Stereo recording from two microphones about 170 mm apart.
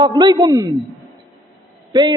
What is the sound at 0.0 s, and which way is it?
Speech, 25° right (ahead or behind).